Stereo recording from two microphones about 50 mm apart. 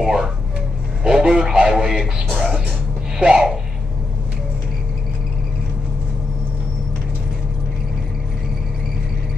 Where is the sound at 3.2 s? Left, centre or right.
Centre.